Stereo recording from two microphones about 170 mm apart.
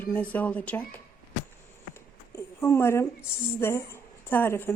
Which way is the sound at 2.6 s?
15° left (ahead or behind).